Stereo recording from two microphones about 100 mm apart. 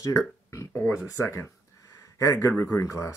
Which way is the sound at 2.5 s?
20° left (ahead or behind).